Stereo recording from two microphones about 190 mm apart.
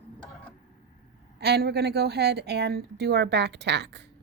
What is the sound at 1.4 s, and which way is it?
Speech, 60° right (ahead or behind).